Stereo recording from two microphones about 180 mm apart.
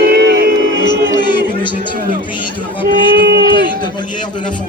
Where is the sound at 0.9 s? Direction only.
25° left (ahead or behind).